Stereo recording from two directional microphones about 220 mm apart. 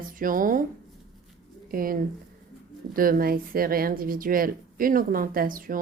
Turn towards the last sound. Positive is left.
turn(degrees=-40)  # may be behind; listen again after turning